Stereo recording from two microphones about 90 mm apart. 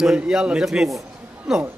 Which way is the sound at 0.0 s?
5° right (ahead or behind).